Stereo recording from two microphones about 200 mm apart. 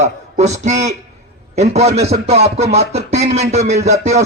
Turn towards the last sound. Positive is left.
turn(degrees=-35)  # may be behind; listen again after turning